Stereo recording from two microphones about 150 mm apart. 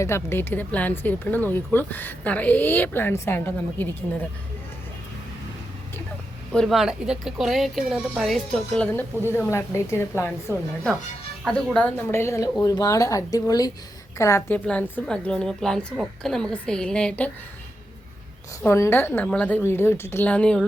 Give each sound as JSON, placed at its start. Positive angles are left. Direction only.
{"t": 0.0, "sound": "speech", "side_deg": 15}
{"t": 6.5, "sound": "a woman's voice", "side_deg": 0}
{"t": 18.6, "sound": "speech", "side_deg": 15}